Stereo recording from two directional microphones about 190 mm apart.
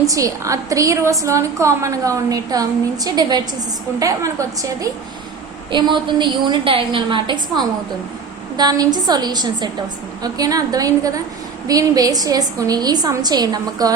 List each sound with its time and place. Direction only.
0.1 s a woman's voice: 15° right (ahead or behind)